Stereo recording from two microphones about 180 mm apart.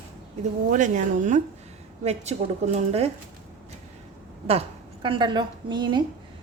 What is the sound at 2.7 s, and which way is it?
Speech, 35° right (ahead or behind).